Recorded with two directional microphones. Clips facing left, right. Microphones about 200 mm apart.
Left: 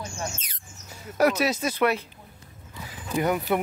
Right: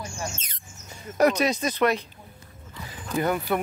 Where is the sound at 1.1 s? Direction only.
5° left (ahead or behind).